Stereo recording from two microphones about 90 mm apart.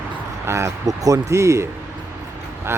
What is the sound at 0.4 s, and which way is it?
Speech, 30° right (ahead or behind).